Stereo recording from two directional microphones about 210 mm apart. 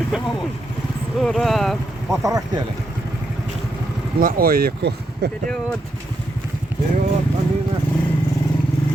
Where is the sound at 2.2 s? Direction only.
15° right (ahead or behind).